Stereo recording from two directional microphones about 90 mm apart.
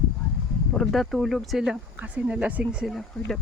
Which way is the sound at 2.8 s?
Centre (ahead or behind).